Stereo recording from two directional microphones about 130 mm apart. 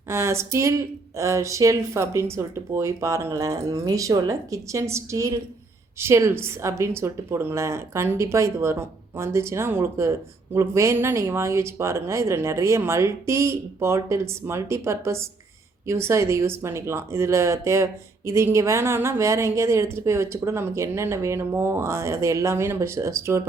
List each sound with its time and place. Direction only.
0.1 s a woman's voice: 20° right (ahead or behind)